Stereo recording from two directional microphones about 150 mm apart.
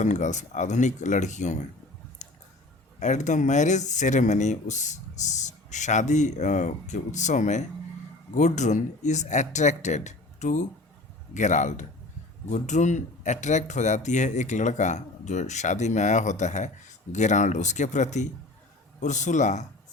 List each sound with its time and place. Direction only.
0.0 s speech: 50° left (ahead or behind)
2.2 s squish: 55° left (ahead or behind)
3.0 s speech: 55° left (ahead or behind)